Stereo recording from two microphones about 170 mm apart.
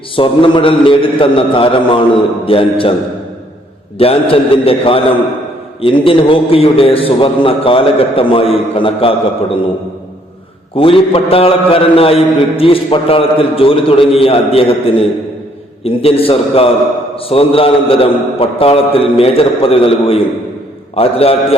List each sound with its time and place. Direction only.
0.2 s a man's voice: 30° left (ahead or behind)
3.9 s a man's voice: 35° left (ahead or behind)
10.8 s a man's voice: 30° left (ahead or behind)